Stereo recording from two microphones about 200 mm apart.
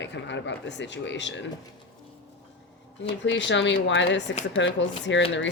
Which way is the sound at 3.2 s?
65° left (ahead or behind).